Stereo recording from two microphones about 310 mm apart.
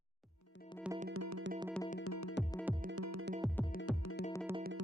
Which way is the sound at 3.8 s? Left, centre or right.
Left.